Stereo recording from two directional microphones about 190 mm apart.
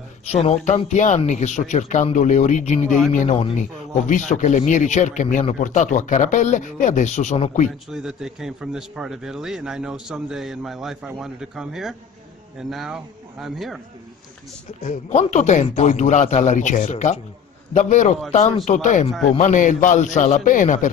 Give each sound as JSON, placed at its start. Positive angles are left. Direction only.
{"t": 0.3, "sound": "speech", "side_deg": 35}
{"t": 7.9, "sound": "a man's voice", "side_deg": -5}
{"t": 14.8, "sound": "speech", "side_deg": 40}